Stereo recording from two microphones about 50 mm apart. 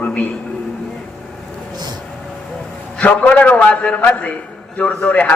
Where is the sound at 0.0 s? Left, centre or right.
Left.